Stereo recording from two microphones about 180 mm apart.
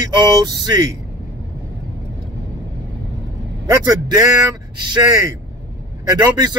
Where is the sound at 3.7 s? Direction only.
20° right (ahead or behind).